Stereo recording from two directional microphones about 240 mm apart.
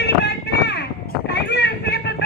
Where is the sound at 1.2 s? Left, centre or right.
Left.